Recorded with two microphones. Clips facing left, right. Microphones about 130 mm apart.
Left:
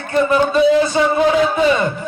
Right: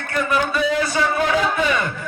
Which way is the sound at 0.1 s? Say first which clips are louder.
Left 7 dB; 25° left (ahead or behind).